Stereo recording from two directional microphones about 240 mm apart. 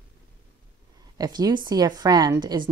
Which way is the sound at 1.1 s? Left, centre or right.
Centre.